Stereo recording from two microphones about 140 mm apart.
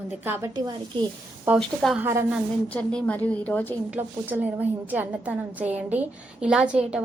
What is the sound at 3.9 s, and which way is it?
A woman's voice, 10° right (ahead or behind).